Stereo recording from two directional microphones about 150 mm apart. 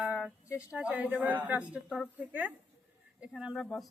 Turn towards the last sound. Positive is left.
turn(degrees=0)  # may be behind; listen again after turning